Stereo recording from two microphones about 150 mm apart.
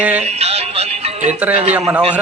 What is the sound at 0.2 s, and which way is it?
Music, 45° right (ahead or behind).